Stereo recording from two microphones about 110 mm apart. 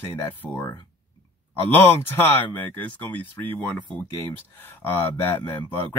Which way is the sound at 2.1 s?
20° left (ahead or behind).